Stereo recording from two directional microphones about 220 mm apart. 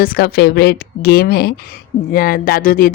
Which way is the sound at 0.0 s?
45° left (ahead or behind).